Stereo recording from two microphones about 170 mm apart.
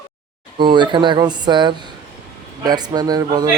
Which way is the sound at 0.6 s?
25° right (ahead or behind).